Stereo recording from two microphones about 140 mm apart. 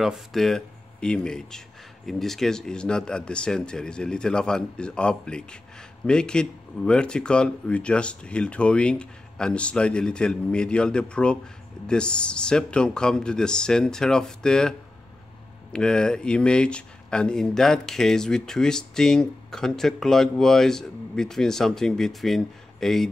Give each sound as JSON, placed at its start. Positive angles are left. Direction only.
{"t": 0.0, "sound": "speech", "side_deg": 0}